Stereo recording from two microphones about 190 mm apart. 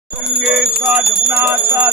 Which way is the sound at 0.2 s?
Centre (ahead or behind).